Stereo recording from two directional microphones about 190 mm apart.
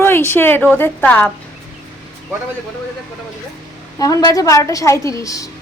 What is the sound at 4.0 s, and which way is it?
A woman's voice, 20° left (ahead or behind).